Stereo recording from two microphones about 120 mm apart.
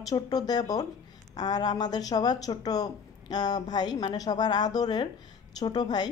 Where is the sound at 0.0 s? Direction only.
30° left (ahead or behind).